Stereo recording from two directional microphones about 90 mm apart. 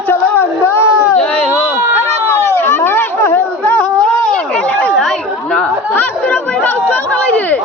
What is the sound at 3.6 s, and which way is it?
Music, 15° left (ahead or behind).